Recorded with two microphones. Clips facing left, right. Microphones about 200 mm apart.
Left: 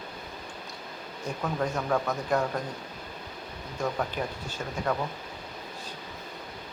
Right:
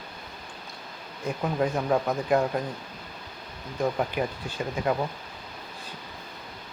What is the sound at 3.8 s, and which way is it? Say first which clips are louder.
Speech: right 4 dB; 15° right (ahead or behind).